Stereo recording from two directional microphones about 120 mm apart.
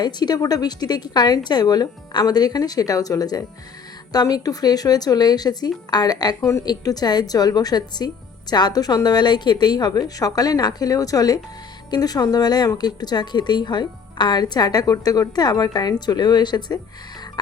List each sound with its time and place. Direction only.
0.0 s speech: 35° left (ahead or behind)